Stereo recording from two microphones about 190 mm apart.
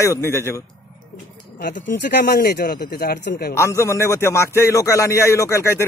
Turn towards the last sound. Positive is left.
turn(degrees=15)  # may be behind; listen again after turning